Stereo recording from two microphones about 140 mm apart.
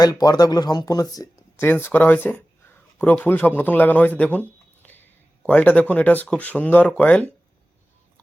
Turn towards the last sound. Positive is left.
turn(degrees=10)  # may be behind; listen again after turning